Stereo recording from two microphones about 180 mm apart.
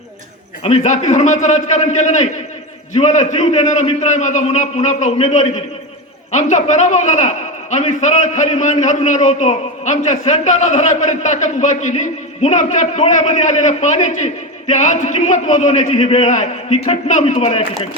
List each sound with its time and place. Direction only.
0.6 s a man's voice: 40° left (ahead or behind)